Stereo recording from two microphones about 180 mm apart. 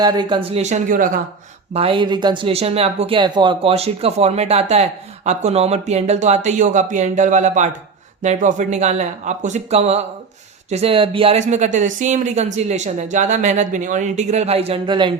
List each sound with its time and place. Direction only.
0.0 s speech: 25° right (ahead or behind); by 1.2 s 50° right (ahead or behind)
1.7 s speech: 30° right (ahead or behind)